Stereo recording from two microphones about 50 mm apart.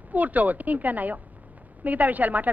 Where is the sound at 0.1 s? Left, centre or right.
Right.